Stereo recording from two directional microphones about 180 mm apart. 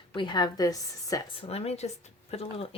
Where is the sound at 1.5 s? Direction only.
35° left (ahead or behind).